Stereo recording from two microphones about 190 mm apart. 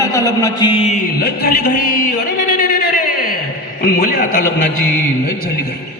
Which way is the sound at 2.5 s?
50° left (ahead or behind).